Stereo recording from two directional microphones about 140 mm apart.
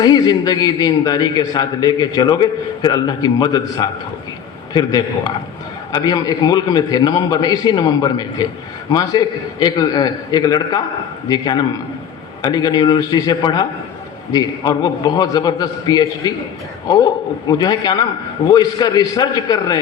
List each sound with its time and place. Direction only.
0.0 s a man's voice: 30° left (ahead or behind)
17.5 s a man's voice: 30° left (ahead or behind)